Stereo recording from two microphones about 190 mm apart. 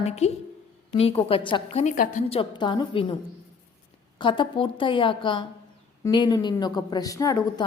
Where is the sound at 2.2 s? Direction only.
25° left (ahead or behind).